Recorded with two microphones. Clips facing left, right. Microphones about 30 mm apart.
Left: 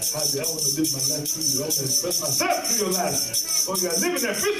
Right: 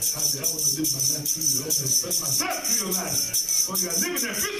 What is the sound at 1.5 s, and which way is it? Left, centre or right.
Speech, left.